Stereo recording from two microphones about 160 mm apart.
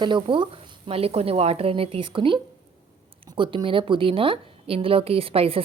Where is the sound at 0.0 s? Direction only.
30° right (ahead or behind).